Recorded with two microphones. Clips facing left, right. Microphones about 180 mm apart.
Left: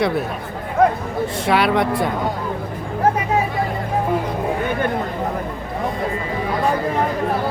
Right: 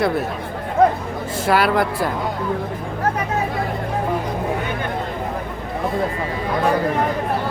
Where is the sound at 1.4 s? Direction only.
Centre (ahead or behind).